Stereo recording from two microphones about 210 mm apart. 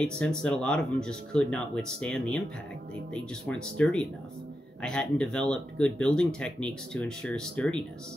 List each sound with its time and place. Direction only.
0.0 s speech: 5° left (ahead or behind)